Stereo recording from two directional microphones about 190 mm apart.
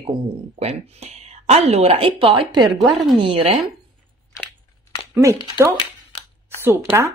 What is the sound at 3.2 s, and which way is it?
Speech, 30° right (ahead or behind).